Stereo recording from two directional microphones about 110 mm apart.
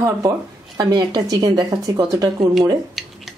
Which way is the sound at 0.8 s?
40° right (ahead or behind).